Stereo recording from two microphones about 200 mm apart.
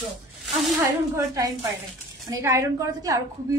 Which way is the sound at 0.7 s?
15° right (ahead or behind).